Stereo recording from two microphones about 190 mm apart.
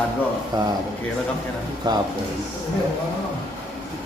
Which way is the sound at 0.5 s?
20° right (ahead or behind).